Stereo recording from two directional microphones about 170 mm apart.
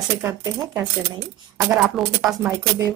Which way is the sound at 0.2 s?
20° right (ahead or behind).